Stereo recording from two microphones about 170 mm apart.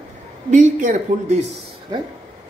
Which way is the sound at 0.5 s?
50° right (ahead or behind).